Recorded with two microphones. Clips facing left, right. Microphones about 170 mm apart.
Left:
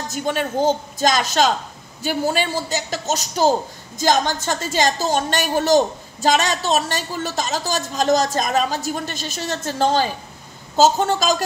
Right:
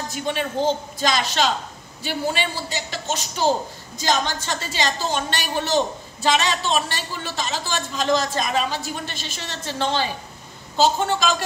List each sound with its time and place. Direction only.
0.1 s a woman's voice: 45° left (ahead or behind)